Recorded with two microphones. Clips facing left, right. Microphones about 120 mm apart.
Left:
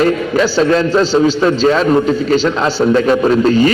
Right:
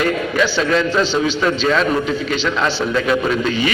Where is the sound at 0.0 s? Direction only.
35° left (ahead or behind).